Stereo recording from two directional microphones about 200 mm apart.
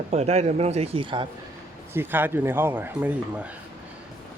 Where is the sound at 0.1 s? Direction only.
35° right (ahead or behind).